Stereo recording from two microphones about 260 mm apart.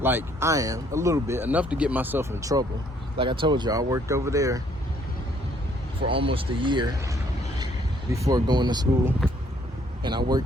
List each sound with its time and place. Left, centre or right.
0.0 s speech: centre
6.0 s speech: centre
8.2 s speech: centre
10.0 s speech: centre